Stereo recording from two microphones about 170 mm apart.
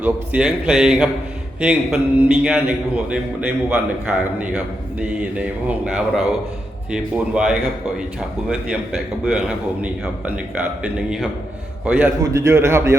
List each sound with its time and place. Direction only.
0.0 s a man's voice: 5° right (ahead or behind)
9.2 s a man's voice: 5° right (ahead or behind)